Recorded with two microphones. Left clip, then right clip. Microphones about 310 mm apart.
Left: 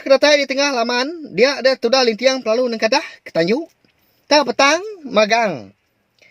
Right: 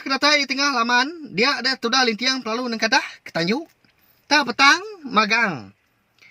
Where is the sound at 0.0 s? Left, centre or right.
Right.